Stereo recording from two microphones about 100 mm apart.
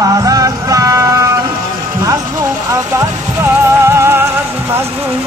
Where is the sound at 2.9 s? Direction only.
30° right (ahead or behind).